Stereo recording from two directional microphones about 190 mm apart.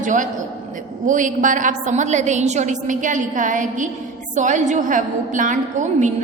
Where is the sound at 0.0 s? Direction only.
40° right (ahead or behind).